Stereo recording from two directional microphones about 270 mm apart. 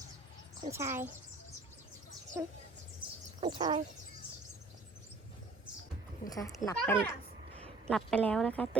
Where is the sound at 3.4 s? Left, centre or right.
Centre.